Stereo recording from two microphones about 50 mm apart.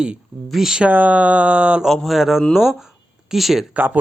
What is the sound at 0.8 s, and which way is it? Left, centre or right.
Speech, right.